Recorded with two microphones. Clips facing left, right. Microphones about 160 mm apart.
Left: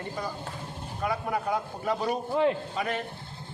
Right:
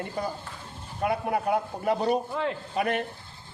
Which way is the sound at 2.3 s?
25° left (ahead or behind).